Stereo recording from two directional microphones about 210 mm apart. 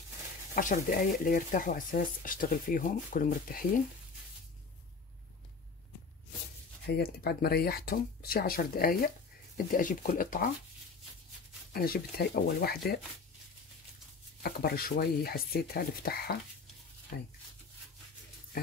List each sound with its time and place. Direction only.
0.6 s speech: 40° left (ahead or behind)
7.0 s speech: 50° left (ahead or behind)
11.7 s speech: 45° left (ahead or behind)
14.4 s speech: 45° left (ahead or behind)